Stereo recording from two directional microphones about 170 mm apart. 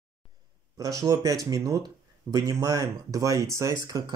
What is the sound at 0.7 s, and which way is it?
Speech, 20° right (ahead or behind).